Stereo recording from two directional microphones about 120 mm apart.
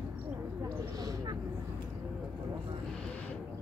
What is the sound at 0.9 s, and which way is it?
Vehicle, 30° right (ahead or behind).